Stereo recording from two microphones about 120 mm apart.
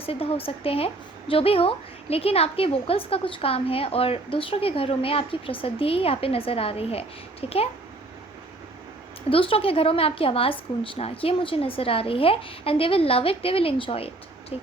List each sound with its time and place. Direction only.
0.0 s a woman's voice: 55° left (ahead or behind)
9.3 s a woman's voice: 50° left (ahead or behind)